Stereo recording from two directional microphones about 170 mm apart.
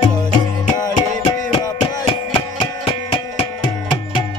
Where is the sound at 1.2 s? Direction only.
30° left (ahead or behind).